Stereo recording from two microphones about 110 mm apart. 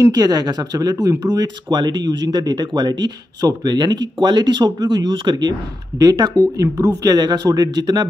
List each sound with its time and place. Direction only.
0.0 s speech: 35° right (ahead or behind)